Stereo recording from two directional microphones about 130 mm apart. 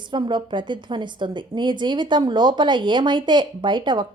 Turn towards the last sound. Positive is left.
turn(degrees=-35)  # may be behind; listen again after turning